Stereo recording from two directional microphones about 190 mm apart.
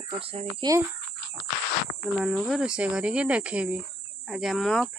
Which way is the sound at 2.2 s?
Centre (ahead or behind).